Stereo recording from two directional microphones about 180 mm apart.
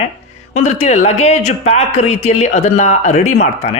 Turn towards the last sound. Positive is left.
turn(degrees=40)  # may be behind; listen again after turning